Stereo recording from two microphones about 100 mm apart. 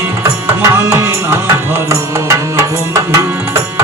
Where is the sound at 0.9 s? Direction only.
25° right (ahead or behind).